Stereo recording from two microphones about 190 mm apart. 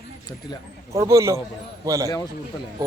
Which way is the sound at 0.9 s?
15° right (ahead or behind).